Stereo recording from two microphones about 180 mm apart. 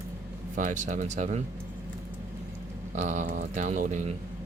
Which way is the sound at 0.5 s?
45° right (ahead or behind).